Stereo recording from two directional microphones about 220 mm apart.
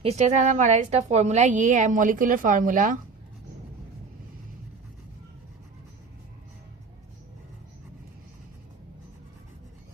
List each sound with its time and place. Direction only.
0.0 s a woman's voice: 30° right (ahead or behind)